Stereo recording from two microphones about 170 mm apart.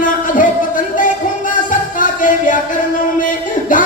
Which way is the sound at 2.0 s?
50° left (ahead or behind).